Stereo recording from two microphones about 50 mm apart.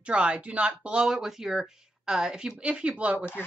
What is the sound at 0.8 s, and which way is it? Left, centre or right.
A woman's voice, centre.